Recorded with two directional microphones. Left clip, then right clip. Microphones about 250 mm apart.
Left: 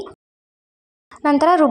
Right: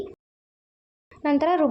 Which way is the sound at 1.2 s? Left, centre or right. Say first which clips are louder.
Left 7 dB; centre.